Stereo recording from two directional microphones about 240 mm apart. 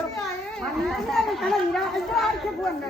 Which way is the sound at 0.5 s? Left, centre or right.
Centre.